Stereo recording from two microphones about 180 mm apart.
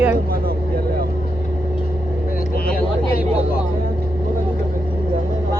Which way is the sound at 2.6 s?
55° left (ahead or behind).